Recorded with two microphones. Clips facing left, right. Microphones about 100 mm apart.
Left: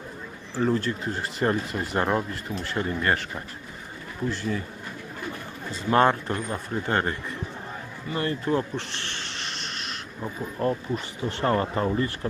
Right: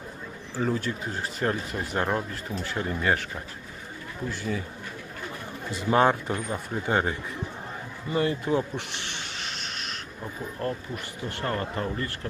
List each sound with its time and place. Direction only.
0.5 s speech: centre (ahead or behind)
5.9 s speech: 5° right (ahead or behind)
9.3 s vehicle: centre (ahead or behind)
10.2 s speech: 20° left (ahead or behind)